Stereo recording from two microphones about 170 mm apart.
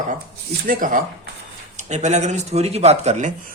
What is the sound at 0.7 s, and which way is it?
Speech, 55° right (ahead or behind).